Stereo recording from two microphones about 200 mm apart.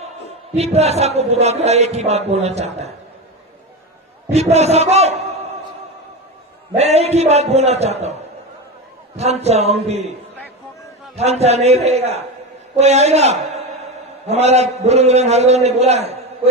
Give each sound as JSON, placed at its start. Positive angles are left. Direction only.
{"t": 0.5, "sound": "speech", "side_deg": -30}
{"t": 4.4, "sound": "speech", "side_deg": -30}
{"t": 6.7, "sound": "speech", "side_deg": -30}
{"t": 9.1, "sound": "speech", "side_deg": -35}
{"t": 11.2, "sound": "a man's voice", "side_deg": -30}